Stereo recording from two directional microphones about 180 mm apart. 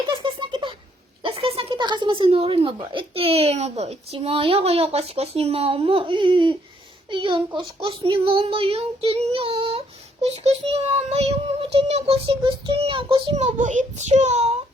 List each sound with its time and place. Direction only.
0.1 s a sound: 25° right (ahead or behind)
2.9 s child singing: 35° right (ahead or behind)
7.1 s speech: 25° right (ahead or behind)
7.8 s child singing: 30° right (ahead or behind)
13.3 s child singing: 40° right (ahead or behind)